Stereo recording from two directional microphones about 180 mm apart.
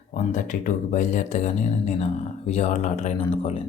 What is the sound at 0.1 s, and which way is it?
Speech, 45° left (ahead or behind).